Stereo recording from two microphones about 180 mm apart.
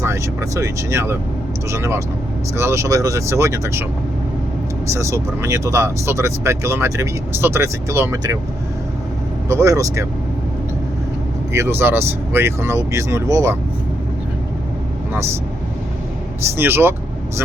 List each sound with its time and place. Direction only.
0.0 s speech: 15° right (ahead or behind)
4.9 s speech: 15° right (ahead or behind)
9.5 s speech: 15° right (ahead or behind)
11.5 s speech: 15° right (ahead or behind)
16.6 s speech: 10° right (ahead or behind)